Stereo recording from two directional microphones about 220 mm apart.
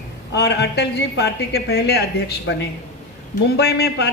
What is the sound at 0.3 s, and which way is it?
A man's voice, 50° left (ahead or behind).